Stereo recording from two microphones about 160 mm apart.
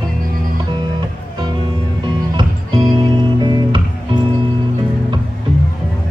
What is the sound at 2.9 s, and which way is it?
Music, 25° right (ahead or behind).